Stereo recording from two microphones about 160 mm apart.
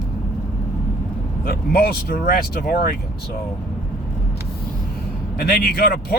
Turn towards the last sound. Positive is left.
turn(degrees=70)  # may be behind; listen again after turning